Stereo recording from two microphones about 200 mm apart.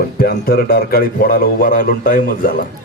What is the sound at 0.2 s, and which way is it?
A man's voice, 45° left (ahead or behind).